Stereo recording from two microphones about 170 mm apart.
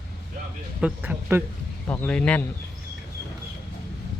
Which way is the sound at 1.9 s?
5° left (ahead or behind).